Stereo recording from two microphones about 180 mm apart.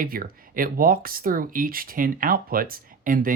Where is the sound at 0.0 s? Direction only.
55° right (ahead or behind).